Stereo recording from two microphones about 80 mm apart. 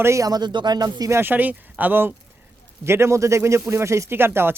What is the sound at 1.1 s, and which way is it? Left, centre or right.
Speech, right.